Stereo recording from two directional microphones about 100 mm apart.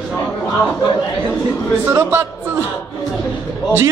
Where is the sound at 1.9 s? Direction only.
20° right (ahead or behind).